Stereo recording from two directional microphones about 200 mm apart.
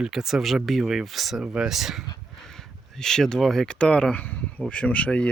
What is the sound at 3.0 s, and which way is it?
Speech, 5° left (ahead or behind).